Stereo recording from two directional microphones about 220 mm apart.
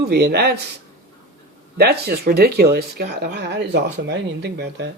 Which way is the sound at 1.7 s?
45° right (ahead or behind).